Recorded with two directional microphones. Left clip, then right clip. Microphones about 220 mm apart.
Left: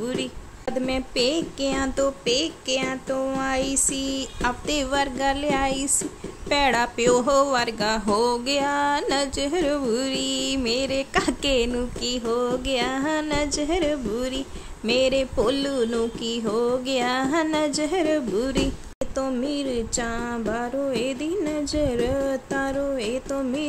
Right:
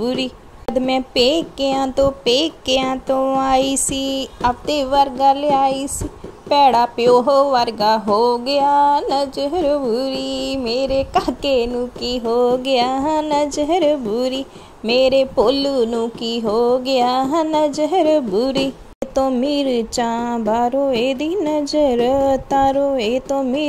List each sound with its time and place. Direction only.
0.0 s music: 20° right (ahead or behind)
0.7 s a sound: 25° right (ahead or behind)
19.1 s music: 25° right (ahead or behind)